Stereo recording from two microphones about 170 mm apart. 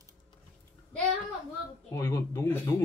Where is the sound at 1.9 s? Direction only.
20° left (ahead or behind).